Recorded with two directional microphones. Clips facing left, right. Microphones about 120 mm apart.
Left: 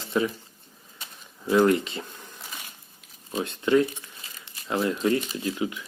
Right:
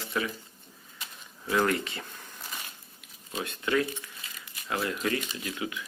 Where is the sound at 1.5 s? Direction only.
20° left (ahead or behind).